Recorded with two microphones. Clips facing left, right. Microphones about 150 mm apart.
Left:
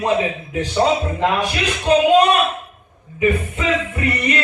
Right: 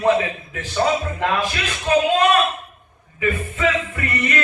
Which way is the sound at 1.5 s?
15° left (ahead or behind).